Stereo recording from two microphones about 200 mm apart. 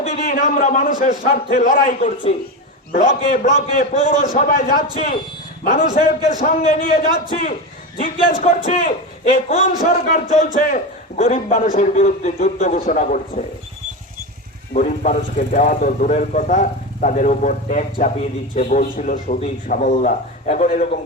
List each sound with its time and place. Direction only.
0.0 s speech: 35° left (ahead or behind)
14.7 s speech: 40° left (ahead or behind)